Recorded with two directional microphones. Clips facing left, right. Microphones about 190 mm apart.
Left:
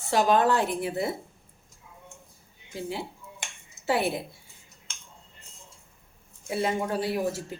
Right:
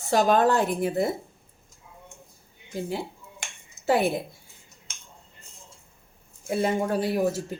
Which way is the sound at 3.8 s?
45° right (ahead or behind).